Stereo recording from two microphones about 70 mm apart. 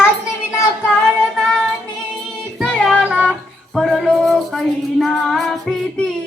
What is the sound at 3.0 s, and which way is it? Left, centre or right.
Child singing, centre.